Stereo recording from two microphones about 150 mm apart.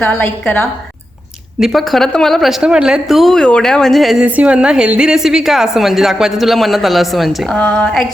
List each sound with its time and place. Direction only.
0.0 s a woman's voice: 10° left (ahead or behind)
1.5 s a woman's voice: centre (ahead or behind)